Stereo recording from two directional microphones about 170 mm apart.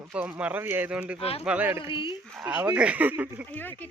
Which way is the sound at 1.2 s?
35° left (ahead or behind).